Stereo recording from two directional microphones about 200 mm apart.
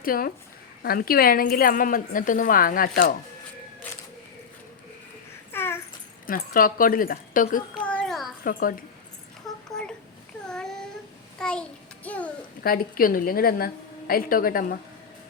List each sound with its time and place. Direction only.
0.0 s a woman's voice: 45° left (ahead or behind)
5.5 s dog: 10° left (ahead or behind)
6.2 s a woman's voice: 45° left (ahead or behind)
7.7 s a sound: 5° left (ahead or behind)
8.4 s a woman's voice: 45° left (ahead or behind)
9.5 s a sound: centre (ahead or behind)
12.6 s a woman's voice: 45° left (ahead or behind)